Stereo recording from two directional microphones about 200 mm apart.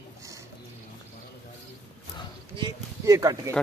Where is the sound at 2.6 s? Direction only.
20° right (ahead or behind).